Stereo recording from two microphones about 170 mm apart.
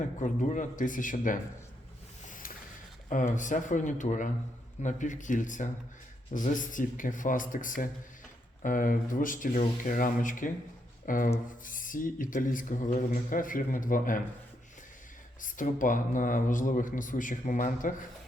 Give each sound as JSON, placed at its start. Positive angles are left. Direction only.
{"t": 0.2, "sound": "speech", "side_deg": 45}
{"t": 3.1, "sound": "speech", "side_deg": 50}
{"t": 15.4, "sound": "speech", "side_deg": 50}